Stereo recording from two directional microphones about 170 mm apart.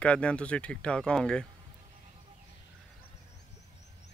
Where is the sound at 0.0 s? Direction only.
5° left (ahead or behind).